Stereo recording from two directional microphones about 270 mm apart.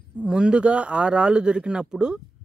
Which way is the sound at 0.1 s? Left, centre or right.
Centre.